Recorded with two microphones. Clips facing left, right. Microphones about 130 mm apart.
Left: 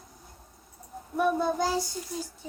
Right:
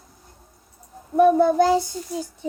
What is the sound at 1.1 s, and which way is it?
Child singing, 60° right (ahead or behind).